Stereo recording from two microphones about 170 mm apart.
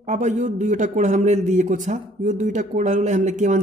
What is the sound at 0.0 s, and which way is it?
Speech, 45° right (ahead or behind).